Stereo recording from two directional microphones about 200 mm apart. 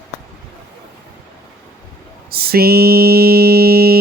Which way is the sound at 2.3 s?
50° right (ahead or behind).